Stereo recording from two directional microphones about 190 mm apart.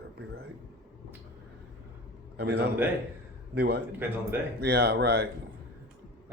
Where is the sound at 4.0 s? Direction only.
10° right (ahead or behind).